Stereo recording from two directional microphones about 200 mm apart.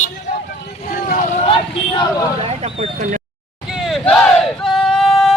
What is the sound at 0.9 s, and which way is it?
Vehicle, 45° left (ahead or behind).